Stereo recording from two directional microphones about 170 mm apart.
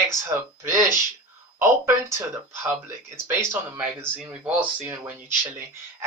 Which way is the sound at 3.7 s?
10° right (ahead or behind).